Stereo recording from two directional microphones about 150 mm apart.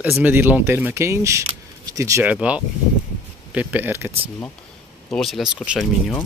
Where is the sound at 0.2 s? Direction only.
10° right (ahead or behind).